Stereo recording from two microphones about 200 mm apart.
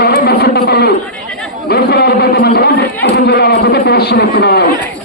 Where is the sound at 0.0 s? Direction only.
50° left (ahead or behind).